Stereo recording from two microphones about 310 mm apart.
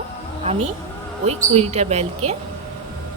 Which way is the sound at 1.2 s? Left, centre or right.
Centre.